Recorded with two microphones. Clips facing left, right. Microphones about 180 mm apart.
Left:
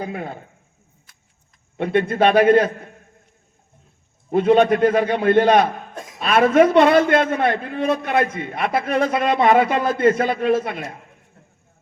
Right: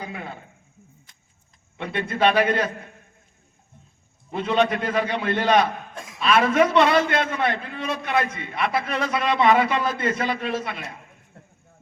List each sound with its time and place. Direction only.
0.0 s a man's voice: 45° left (ahead or behind)
1.7 s a man's voice: 50° left (ahead or behind)
4.3 s a man's voice: 50° left (ahead or behind)